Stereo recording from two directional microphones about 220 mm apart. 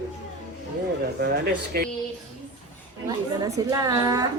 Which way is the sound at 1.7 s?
45° right (ahead or behind).